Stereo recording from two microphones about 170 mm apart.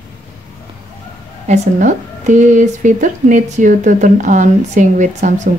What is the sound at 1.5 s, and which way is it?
Speech, 45° right (ahead or behind).